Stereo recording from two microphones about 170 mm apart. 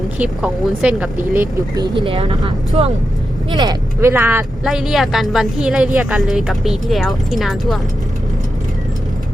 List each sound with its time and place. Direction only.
0.2 s speech: 5° right (ahead or behind)
1.1 s speech: 50° right (ahead or behind)
1.7 s speech: 25° right (ahead or behind)
4.1 s speech: 15° right (ahead or behind)
4.6 s speech: centre (ahead or behind)